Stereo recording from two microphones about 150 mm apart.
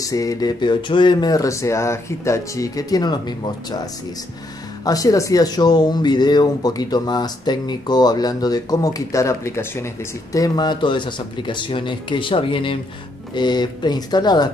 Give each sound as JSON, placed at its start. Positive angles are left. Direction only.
{"t": 0.0, "sound": "speech", "side_deg": 25}
{"t": 4.8, "sound": "speech", "side_deg": 25}